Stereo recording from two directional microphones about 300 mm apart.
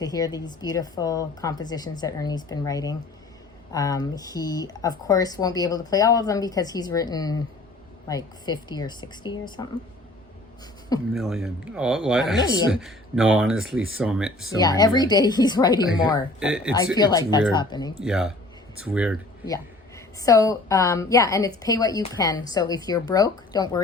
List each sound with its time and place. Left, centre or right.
0.0 s speech: centre
11.1 s speech: centre
13.7 s speech: right
14.0 s speech: centre
14.6 s speech: centre
16.4 s speech: centre
16.7 s speech: centre
17.9 s speech: centre
20.2 s speech: centre